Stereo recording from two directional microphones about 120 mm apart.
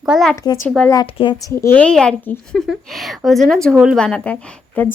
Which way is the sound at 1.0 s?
45° left (ahead or behind).